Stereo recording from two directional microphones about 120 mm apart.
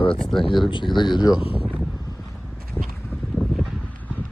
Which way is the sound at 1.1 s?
35° left (ahead or behind).